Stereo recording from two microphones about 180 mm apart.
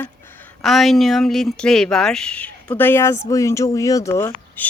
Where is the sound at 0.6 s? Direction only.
Centre (ahead or behind).